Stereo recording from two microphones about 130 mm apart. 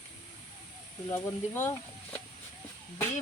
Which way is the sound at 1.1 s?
25° left (ahead or behind).